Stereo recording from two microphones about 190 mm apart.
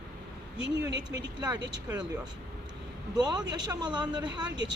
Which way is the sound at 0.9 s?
70° right (ahead or behind).